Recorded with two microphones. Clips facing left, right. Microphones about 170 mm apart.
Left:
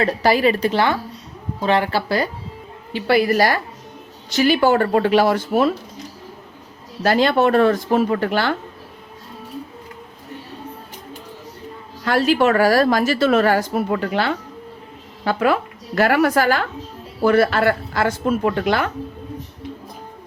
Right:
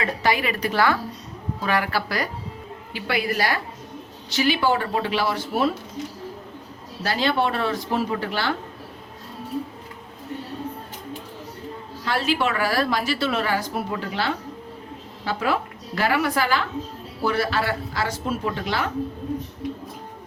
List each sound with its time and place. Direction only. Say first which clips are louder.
0.0 s a woman's voice: left 7 dB; 35° left (ahead or behind)
7.0 s a woman's voice: left 7 dB; 55° left (ahead or behind)
12.0 s a woman's voice: left 7 dB; 45° left (ahead or behind)